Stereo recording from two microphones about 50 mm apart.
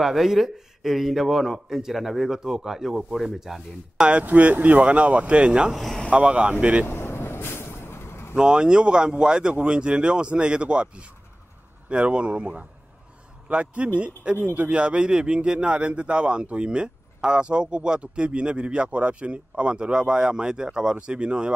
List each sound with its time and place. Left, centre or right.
0.0 s speech: centre
4.2 s a man's voice: right
5.8 s speech: centre
6.0 s a man's voice: right
6.9 s vehicle: left
8.4 s a man's voice: centre; by 14.7 s right
14.7 s a man's voice: right